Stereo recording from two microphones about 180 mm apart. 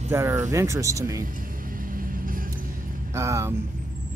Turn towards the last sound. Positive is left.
turn(degrees=-15)  # may be behind; listen again after turning